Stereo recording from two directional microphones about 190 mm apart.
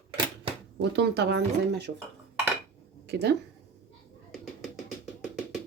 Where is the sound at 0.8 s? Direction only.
60° right (ahead or behind).